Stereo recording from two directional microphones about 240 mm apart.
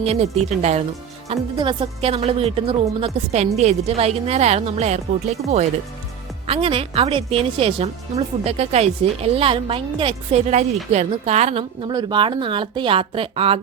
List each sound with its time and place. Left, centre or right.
0.0 s a woman's voice: right
6.5 s a woman's voice: right